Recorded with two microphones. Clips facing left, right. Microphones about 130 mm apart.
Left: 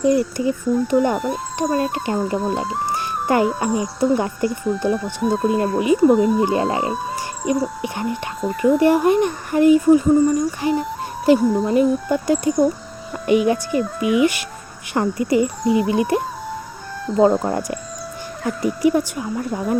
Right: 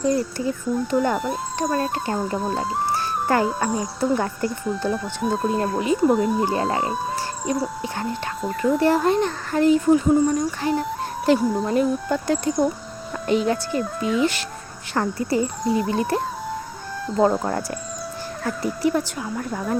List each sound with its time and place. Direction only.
0.0 s speech: 15° left (ahead or behind)
1.1 s speech: centre (ahead or behind)
2.9 s music: 15° left (ahead or behind)
3.7 s speech: 5° left (ahead or behind)
5.2 s speech: centre (ahead or behind)
6.4 s speech: 20° left (ahead or behind)
8.4 s speech: centre (ahead or behind)
8.8 s speech: 15° left (ahead or behind)